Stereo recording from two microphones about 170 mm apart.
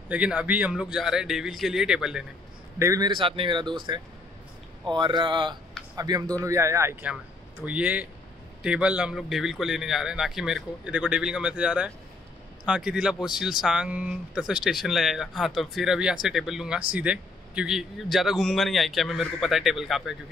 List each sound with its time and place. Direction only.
0.1 s speech: 5° right (ahead or behind)
2.8 s speech: 20° right (ahead or behind); by 20.2 s centre (ahead or behind)